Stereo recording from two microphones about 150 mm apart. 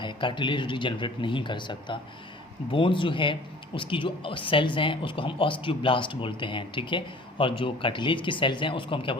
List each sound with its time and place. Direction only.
0.0 s speech: 35° left (ahead or behind)